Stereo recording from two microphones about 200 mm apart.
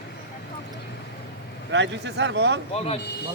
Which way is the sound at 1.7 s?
65° right (ahead or behind).